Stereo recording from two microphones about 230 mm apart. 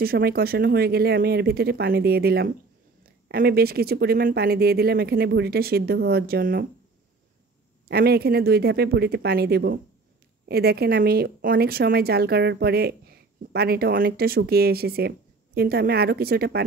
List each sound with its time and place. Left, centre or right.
0.0 s speech: right
7.9 s speech: right